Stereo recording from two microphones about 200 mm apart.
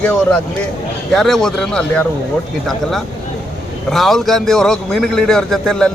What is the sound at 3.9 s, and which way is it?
A man's voice, centre (ahead or behind).